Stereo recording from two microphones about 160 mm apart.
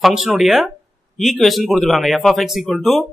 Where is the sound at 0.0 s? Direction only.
Centre (ahead or behind).